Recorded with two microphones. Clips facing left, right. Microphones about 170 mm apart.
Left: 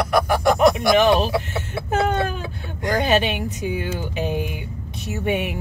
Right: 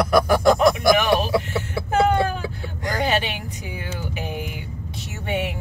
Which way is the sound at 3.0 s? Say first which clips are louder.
Left 3 dB; 20° left (ahead or behind).